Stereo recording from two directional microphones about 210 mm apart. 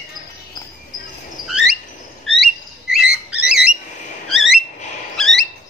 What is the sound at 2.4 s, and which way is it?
Bird, centre (ahead or behind).